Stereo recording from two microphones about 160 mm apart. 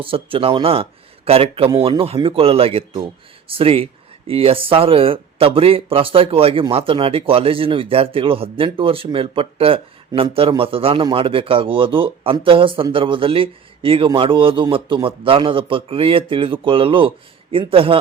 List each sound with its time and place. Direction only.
0.0 s a man's voice: 35° right (ahead or behind)